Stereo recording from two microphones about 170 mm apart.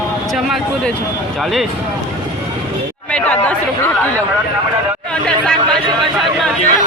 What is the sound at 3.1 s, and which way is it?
Chatter, 10° left (ahead or behind).